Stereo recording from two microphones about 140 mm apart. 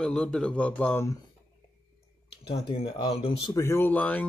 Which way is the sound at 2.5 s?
40° left (ahead or behind).